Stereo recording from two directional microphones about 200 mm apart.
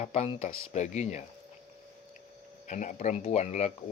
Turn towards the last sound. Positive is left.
turn(degrees=35)  # may be behind; listen again after turning